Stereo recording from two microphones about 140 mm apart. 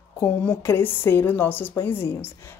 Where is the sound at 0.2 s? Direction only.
15° left (ahead or behind).